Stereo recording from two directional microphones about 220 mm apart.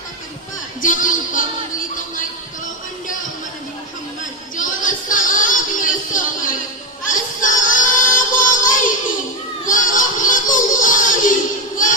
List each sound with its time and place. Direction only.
0.8 s a sound: 35° left (ahead or behind)
4.5 s music: 35° left (ahead or behind)
7.1 s child singing: 35° left (ahead or behind)